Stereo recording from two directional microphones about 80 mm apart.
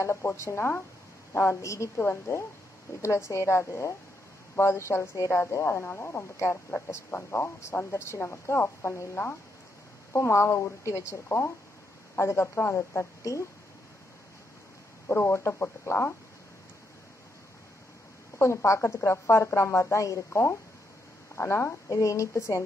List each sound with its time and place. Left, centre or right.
0.0 s a woman's voice: left
7.1 s a woman's voice: left
7.3 s a woman's voice: left
15.0 s a woman's voice: left
18.4 s a woman's voice: left
21.8 s a woman's voice: left